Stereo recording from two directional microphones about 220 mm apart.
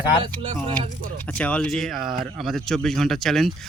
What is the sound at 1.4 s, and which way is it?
Speech, 5° left (ahead or behind).